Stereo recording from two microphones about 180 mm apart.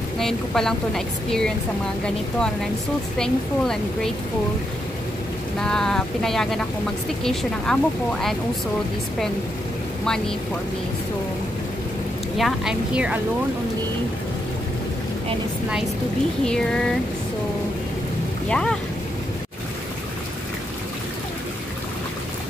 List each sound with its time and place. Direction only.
0.2 s speech: 5° left (ahead or behind)
3.2 s speech: 5° left (ahead or behind)
5.6 s speech: 5° left (ahead or behind)
10.0 s speech: 5° left (ahead or behind)
12.4 s speech: centre (ahead or behind)
16.4 s speech: 5° left (ahead or behind)
18.5 s speech: 5° left (ahead or behind)